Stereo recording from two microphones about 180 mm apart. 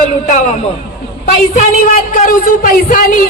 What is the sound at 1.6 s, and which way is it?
Speech, 45° left (ahead or behind).